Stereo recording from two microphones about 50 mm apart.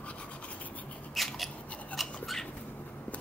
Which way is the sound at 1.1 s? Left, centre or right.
Centre.